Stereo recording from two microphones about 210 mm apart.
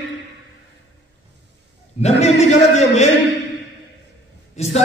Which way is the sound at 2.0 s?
35° left (ahead or behind).